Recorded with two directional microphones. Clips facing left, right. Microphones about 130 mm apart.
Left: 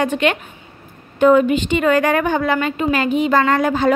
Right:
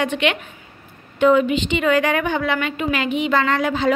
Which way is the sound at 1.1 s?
45° left (ahead or behind).